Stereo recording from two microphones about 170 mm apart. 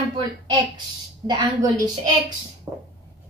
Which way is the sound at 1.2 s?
25° right (ahead or behind).